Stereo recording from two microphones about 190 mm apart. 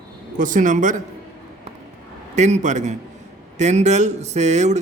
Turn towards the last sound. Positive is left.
turn(degrees=-35)  # may be behind; listen again after turning